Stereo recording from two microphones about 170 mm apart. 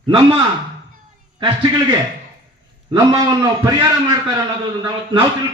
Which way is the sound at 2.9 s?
20° right (ahead or behind).